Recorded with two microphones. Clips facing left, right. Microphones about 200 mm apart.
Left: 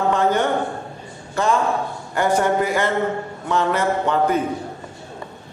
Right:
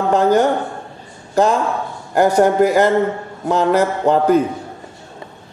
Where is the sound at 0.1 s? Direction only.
40° right (ahead or behind).